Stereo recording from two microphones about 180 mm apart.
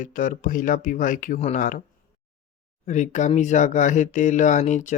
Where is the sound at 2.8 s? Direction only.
40° left (ahead or behind).